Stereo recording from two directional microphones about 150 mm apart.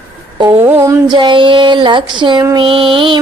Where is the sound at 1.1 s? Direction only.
30° right (ahead or behind).